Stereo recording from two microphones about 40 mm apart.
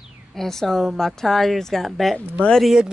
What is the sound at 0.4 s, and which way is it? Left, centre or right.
Speech, centre.